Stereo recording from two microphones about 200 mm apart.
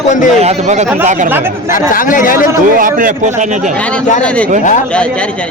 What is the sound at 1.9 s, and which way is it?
Speech, 45° left (ahead or behind).